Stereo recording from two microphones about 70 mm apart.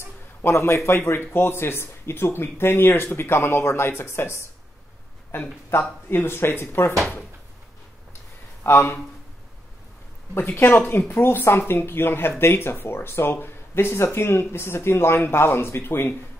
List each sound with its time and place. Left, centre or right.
0.4 s speech: left
8.6 s speech: left
10.3 s speech: left